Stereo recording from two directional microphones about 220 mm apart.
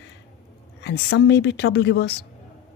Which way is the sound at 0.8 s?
50° left (ahead or behind).